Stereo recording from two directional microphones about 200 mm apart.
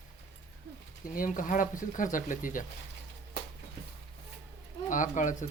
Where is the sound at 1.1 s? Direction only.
40° left (ahead or behind).